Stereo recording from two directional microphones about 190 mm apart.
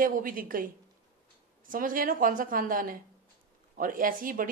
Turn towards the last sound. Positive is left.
turn(degrees=-45)  # may be behind; listen again after turning